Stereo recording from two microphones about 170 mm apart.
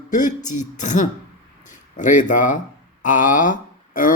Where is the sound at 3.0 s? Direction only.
50° left (ahead or behind).